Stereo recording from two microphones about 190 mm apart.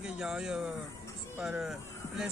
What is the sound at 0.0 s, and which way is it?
Speech, 5° right (ahead or behind).